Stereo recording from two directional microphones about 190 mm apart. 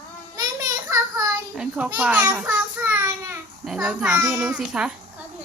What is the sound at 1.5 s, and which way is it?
A child's voice, 5° right (ahead or behind).